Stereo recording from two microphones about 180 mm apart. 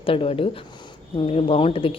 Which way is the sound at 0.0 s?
30° left (ahead or behind).